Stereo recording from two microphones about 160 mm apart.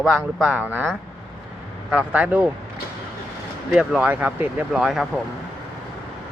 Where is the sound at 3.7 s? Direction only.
Centre (ahead or behind).